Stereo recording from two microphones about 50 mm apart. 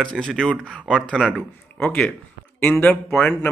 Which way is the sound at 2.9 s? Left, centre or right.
Left.